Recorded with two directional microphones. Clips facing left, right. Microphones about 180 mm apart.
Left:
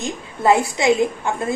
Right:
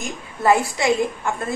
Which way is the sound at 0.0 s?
25° left (ahead or behind).